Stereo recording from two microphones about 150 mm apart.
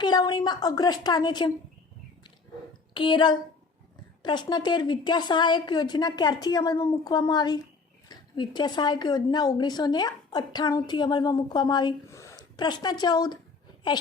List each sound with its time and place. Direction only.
0.0 s speech: 30° left (ahead or behind)
2.9 s a woman's voice: 30° left (ahead or behind)